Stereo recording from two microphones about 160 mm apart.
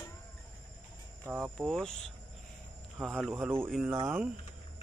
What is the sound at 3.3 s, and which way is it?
Speech, 15° right (ahead or behind).